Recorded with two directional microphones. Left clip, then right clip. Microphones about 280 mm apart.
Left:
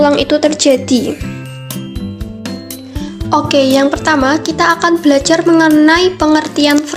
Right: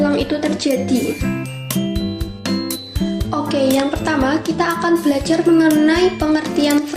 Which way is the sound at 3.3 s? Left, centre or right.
Left.